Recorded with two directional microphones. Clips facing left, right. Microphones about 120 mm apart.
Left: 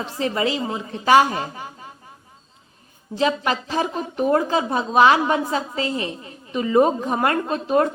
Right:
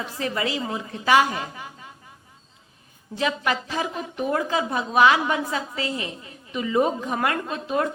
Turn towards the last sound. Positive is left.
turn(degrees=40)  # may be behind; listen again after turning